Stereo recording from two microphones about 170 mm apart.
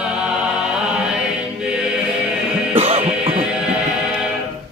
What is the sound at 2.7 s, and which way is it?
Music, 35° right (ahead or behind).